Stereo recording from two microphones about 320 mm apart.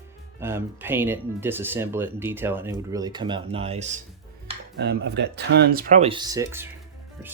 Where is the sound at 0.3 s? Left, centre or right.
Centre.